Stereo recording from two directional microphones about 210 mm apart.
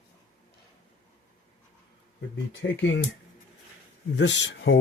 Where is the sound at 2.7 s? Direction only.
65° left (ahead or behind).